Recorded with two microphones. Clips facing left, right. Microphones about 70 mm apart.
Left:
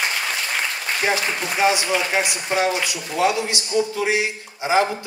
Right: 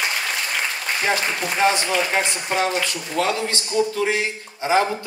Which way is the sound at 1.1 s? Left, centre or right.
Centre.